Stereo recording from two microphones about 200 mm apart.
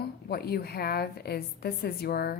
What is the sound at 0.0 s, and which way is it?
A woman's voice, 50° left (ahead or behind).